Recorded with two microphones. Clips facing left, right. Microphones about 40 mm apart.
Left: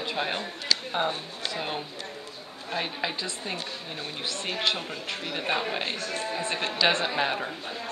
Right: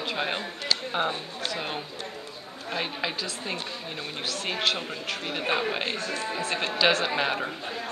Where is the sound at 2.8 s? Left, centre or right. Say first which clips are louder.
Even; centre.